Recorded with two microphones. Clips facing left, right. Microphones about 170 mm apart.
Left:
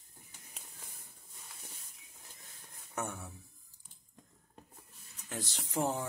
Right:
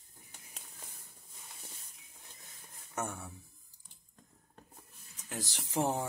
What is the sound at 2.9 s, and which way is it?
Speech, centre (ahead or behind).